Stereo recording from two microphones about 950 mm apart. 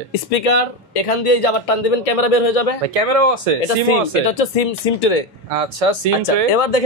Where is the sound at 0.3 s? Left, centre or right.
Left.